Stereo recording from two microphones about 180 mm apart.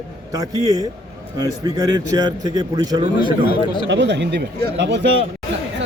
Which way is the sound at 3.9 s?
75° right (ahead or behind).